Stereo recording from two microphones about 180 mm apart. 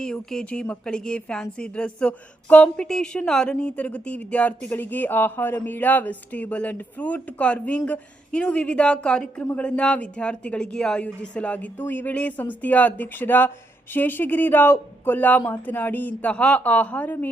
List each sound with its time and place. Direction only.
0.0 s speech: 5° left (ahead or behind)